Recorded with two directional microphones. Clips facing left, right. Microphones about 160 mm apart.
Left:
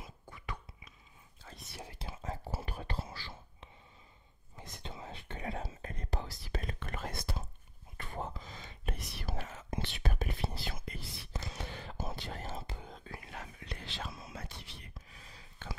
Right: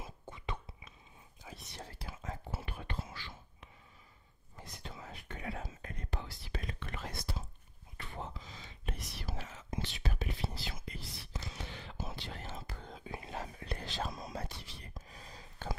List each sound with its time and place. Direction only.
0.0 s whispering: 25° right (ahead or behind)
1.4 s whispering: 5° right (ahead or behind)
1.8 s speech: 20° left (ahead or behind)
4.6 s speech: 20° left (ahead or behind); by 7.4 s 55° left (ahead or behind)
8.0 s whispering: 50° left (ahead or behind)
13.0 s whispering: 25° right (ahead or behind)
13.7 s whispering: 40° right (ahead or behind)